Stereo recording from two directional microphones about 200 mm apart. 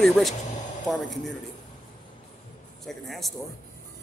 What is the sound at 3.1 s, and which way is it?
Speech, centre (ahead or behind).